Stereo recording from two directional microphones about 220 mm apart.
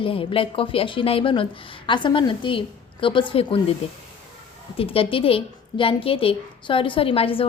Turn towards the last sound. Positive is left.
turn(degrees=25)  # may be behind; listen again after turning